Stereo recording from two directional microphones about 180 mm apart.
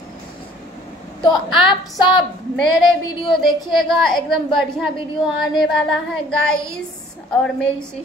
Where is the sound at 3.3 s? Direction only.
Centre (ahead or behind).